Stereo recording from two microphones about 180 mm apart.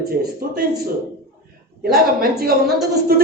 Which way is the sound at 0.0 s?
55° right (ahead or behind).